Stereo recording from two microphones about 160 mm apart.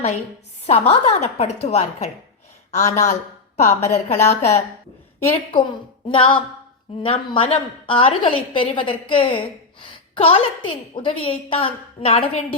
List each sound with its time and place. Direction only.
0.7 s a woman's voice: 40° left (ahead or behind)
6.1 s a woman's voice: 35° left (ahead or behind)